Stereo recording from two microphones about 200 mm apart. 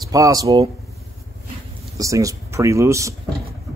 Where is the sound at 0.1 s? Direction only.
15° right (ahead or behind).